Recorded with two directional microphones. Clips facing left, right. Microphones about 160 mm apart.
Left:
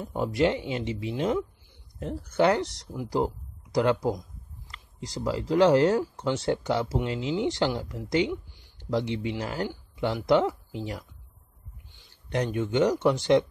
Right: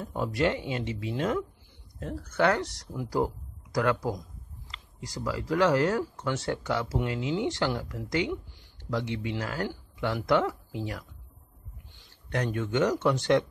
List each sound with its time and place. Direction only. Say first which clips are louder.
0.0 s speech: left 3 dB; 15° left (ahead or behind)
12.4 s speech: left 2 dB; 15° left (ahead or behind)